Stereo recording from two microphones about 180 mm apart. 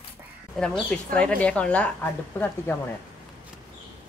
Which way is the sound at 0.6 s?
5° left (ahead or behind).